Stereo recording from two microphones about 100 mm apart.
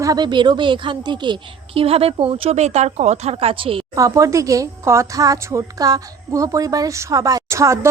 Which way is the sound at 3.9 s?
35° right (ahead or behind).